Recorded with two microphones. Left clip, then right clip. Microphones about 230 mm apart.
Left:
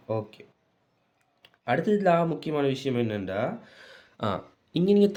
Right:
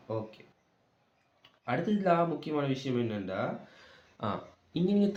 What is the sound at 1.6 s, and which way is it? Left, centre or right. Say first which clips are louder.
Speech: left 7 dB; left.